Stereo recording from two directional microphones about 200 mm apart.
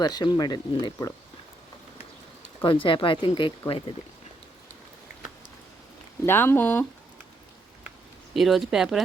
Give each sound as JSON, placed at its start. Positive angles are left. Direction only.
{"t": 0.0, "sound": "speech", "side_deg": 20}
{"t": 2.6, "sound": "speech", "side_deg": 25}
{"t": 6.2, "sound": "speech", "side_deg": 10}
{"t": 8.3, "sound": "speech", "side_deg": 0}